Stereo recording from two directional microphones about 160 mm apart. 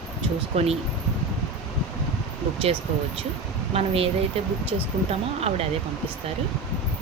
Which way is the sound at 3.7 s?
40° right (ahead or behind).